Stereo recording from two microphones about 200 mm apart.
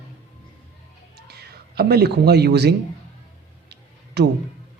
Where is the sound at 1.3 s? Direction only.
55° right (ahead or behind).